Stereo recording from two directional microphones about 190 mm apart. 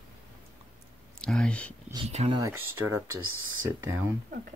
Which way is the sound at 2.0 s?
35° right (ahead or behind).